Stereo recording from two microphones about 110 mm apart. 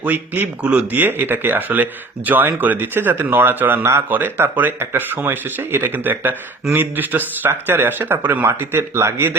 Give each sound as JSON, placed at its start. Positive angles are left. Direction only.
{"t": 0.0, "sound": "speech", "side_deg": -15}